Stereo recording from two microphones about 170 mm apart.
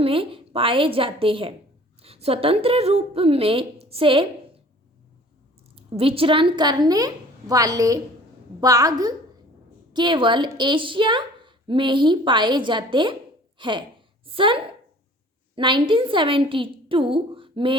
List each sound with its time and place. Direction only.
0.0 s a woman's voice: 30° right (ahead or behind)
5.7 s a woman's voice: 35° right (ahead or behind)